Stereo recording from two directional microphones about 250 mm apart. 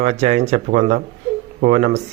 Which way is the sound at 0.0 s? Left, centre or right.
Right.